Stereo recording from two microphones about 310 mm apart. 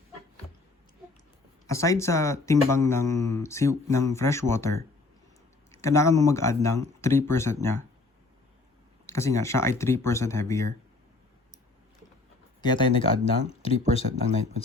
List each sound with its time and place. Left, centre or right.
1.6 s speech: centre
5.8 s speech: centre
9.0 s speech: centre
12.6 s speech: centre